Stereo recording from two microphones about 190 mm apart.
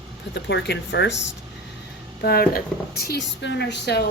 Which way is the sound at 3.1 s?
65° left (ahead or behind).